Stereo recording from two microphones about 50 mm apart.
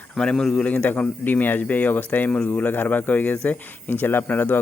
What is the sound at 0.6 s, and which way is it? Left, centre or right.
Speech, left.